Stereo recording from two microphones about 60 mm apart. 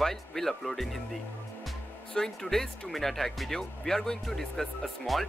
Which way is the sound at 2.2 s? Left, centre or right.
Centre.